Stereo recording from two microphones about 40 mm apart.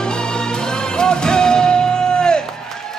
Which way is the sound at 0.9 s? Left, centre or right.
Centre.